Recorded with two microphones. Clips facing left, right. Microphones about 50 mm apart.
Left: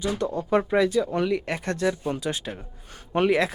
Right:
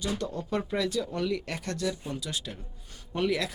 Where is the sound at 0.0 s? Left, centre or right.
Left.